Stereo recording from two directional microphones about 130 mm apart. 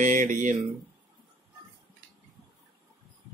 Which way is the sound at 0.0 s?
80° right.